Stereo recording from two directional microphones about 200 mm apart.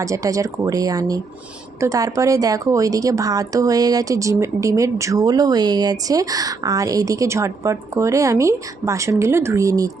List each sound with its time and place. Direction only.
0.0 s a woman's voice: 15° right (ahead or behind)